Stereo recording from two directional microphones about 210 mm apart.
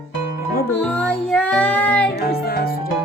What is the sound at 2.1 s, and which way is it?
Music, 45° left (ahead or behind).